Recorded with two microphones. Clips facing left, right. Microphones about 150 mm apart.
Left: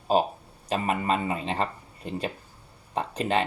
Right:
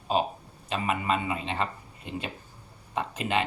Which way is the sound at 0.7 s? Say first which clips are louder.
Left 2 dB; 40° left (ahead or behind).